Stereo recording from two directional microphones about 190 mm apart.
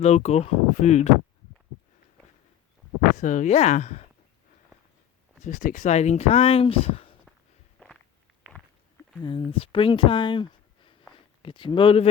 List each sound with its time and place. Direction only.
0.0 s speech: 35° left (ahead or behind)
3.2 s speech: 40° left (ahead or behind)
5.4 s speech: 45° left (ahead or behind)
9.2 s speech: 25° left (ahead or behind)